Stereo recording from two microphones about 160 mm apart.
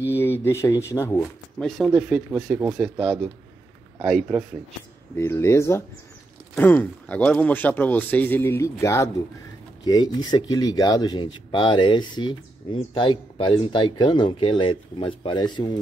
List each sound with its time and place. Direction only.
0.0 s speech: 15° left (ahead or behind)
1.6 s speech: centre (ahead or behind)
5.1 s speech: 15° left (ahead or behind)